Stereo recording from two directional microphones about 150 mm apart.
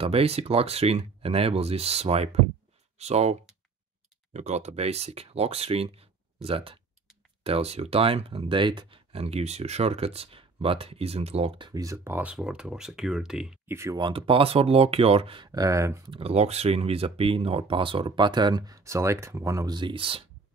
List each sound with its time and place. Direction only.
0.0 s speech: 40° right (ahead or behind); by 13.6 s 5° right (ahead or behind)
13.7 s speech: 20° right (ahead or behind)
16.1 s speech: 40° right (ahead or behind)